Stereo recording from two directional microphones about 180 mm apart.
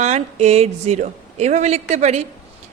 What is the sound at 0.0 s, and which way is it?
A woman's voice, 40° right (ahead or behind).